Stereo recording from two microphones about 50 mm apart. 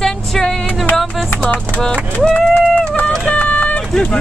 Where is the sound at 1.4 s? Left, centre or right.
Left.